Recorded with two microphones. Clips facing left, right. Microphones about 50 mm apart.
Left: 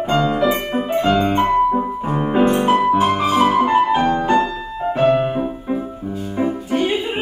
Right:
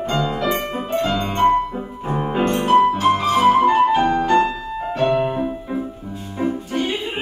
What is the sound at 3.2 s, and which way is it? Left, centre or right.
Flute, centre.